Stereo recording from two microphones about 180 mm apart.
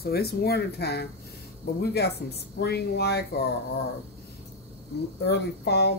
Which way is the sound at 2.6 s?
65° left (ahead or behind).